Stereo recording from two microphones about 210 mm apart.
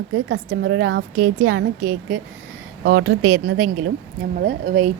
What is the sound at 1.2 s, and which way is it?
Speech, 85° right.